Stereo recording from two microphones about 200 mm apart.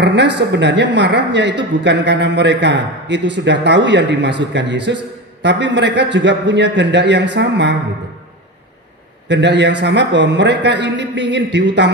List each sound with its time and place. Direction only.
0.0 s a man's voice: 60° right (ahead or behind)
9.3 s a man's voice: 60° right (ahead or behind)